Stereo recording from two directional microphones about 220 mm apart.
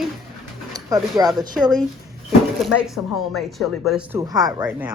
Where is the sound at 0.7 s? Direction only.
15° right (ahead or behind).